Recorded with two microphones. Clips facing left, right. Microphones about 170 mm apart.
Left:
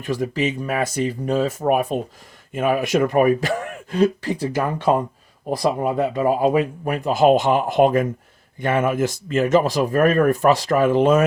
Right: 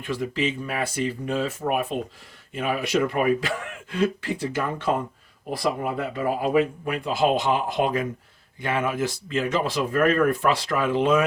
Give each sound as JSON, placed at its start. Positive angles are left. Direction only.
{"t": 0.0, "sound": "speech", "side_deg": 40}